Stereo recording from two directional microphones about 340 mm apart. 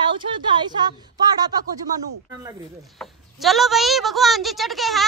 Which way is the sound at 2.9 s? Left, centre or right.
Centre.